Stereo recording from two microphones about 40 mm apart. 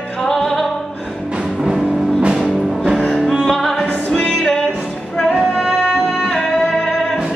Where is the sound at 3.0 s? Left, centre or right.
Centre.